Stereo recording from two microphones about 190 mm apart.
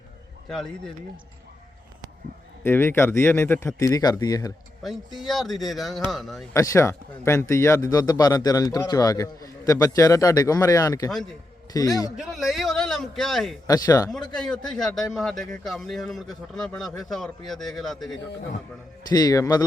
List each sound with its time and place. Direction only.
0.4 s a man's voice: 5° left (ahead or behind)
2.6 s a man's voice: 10° left (ahead or behind)
4.8 s a man's voice: centre (ahead or behind)
6.5 s a man's voice: 15° left (ahead or behind)
11.1 s a man's voice: centre (ahead or behind)
11.7 s a man's voice: 20° left (ahead or behind)
12.1 s a man's voice: 5° right (ahead or behind)
13.7 s a man's voice: 20° left (ahead or behind)
14.1 s a man's voice: 5° left (ahead or behind)
19.0 s a man's voice: 20° left (ahead or behind)